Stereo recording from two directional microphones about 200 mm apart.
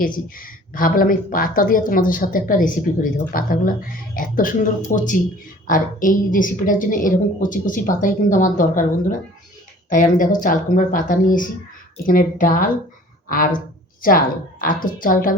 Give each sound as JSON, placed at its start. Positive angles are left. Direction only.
{"t": 0.0, "sound": "a woman's voice", "side_deg": 45}